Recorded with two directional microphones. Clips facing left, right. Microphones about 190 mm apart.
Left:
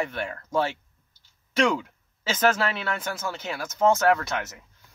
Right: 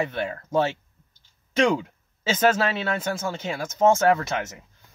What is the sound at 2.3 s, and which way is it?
Speech, 25° right (ahead or behind).